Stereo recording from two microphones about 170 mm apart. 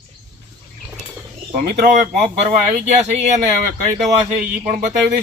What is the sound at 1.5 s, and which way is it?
Speech, 50° right (ahead or behind).